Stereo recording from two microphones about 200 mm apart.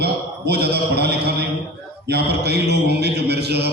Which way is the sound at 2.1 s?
55° right (ahead or behind).